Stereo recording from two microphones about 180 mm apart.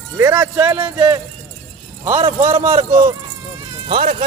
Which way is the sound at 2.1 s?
45° right (ahead or behind).